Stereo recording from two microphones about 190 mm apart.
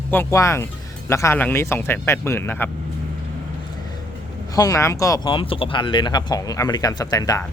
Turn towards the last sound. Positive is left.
turn(degrees=20)  # may be behind; listen again after turning